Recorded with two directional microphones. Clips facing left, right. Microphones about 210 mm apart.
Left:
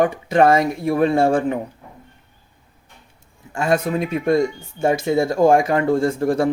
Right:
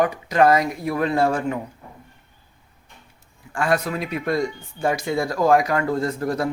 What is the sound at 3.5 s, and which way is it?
Speech, 25° left (ahead or behind).